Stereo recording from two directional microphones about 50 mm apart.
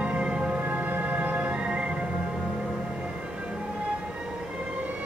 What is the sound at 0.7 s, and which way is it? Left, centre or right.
Music, right.